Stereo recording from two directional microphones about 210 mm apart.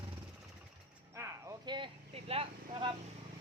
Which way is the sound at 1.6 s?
25° right (ahead or behind).